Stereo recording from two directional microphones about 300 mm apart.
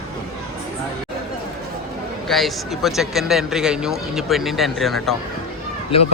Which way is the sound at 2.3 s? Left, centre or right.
Centre.